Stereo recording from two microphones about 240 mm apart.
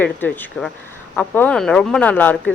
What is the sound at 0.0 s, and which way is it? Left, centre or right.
Speech, centre.